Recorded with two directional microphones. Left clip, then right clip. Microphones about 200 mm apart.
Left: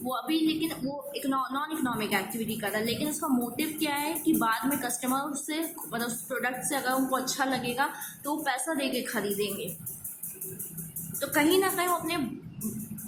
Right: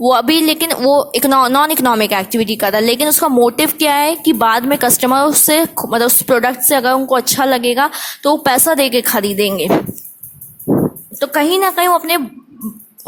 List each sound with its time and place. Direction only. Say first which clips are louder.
0.1 s a woman's voice: right 15 dB; 55° right (ahead or behind)
11.2 s a woman's voice: right 12 dB; 45° right (ahead or behind)